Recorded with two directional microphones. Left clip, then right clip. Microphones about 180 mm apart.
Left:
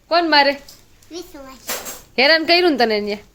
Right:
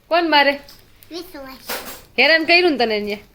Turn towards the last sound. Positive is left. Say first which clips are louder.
# left 2 dB
turn(degrees=25)  # may be behind; listen again after turning